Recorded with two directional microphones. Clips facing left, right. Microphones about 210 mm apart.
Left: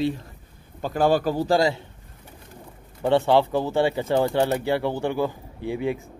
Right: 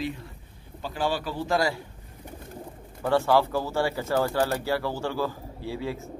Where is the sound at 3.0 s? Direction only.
25° left (ahead or behind).